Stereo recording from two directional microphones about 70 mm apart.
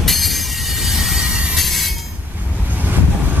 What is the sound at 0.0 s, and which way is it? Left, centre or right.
Train, centre.